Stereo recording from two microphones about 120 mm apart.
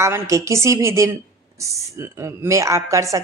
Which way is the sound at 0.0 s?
25° right (ahead or behind).